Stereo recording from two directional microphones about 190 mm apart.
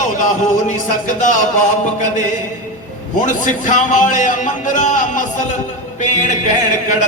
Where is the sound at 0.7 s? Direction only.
40° left (ahead or behind).